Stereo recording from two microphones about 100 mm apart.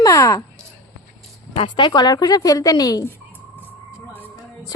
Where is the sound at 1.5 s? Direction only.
55° left (ahead or behind); by 3.0 s 35° left (ahead or behind).